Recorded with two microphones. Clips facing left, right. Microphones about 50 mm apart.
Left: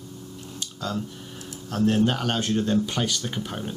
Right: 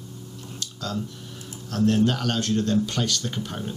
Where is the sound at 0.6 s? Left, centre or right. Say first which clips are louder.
Left 1 dB; centre.